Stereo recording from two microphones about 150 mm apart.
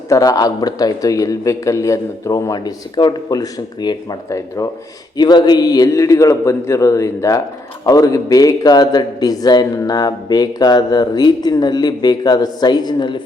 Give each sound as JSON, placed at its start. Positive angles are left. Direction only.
{"t": 0.1, "sound": "a man's voice", "side_deg": 25}